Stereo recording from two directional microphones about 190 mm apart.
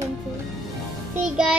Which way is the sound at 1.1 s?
5° right (ahead or behind).